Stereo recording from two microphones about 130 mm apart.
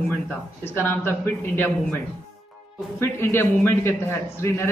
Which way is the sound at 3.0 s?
20° left (ahead or behind).